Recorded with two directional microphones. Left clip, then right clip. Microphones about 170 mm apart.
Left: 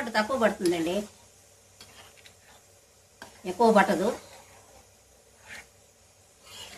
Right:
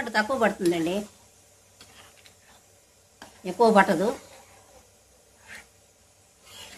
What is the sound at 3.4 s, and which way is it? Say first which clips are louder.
Speech: right 2 dB; 60° right (ahead or behind).